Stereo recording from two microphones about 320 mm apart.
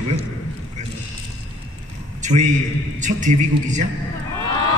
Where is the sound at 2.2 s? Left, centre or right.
Right.